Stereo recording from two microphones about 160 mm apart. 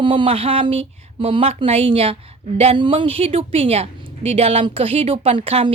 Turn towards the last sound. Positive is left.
turn(degrees=-35)  # may be behind; listen again after turning